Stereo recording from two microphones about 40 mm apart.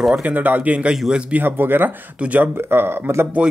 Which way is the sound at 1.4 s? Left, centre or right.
Right.